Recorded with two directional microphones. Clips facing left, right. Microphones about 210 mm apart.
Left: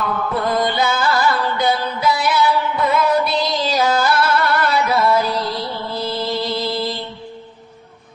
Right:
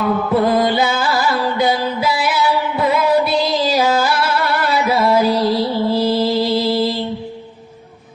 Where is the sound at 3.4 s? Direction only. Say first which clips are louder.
Right 3 dB; centre (ahead or behind).